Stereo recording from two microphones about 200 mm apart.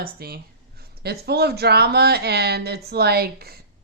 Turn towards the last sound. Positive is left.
turn(degrees=-50)  # may be behind; listen again after turning